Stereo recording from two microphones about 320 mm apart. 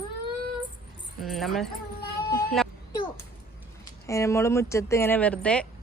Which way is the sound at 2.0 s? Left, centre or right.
Left.